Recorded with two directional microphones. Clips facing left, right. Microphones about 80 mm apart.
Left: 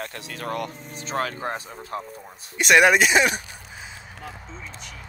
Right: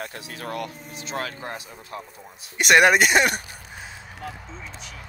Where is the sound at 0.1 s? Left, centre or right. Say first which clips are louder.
Left 2 dB; left.